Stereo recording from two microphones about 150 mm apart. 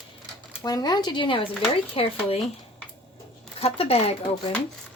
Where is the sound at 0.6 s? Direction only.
25° left (ahead or behind).